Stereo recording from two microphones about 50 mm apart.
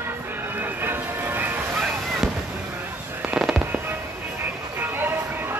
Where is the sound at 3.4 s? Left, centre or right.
Centre.